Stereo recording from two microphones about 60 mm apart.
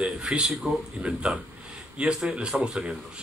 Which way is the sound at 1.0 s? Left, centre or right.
Centre.